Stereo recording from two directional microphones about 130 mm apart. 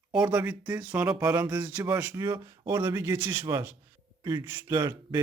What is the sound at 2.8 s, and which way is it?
A man's voice, 20° right (ahead or behind).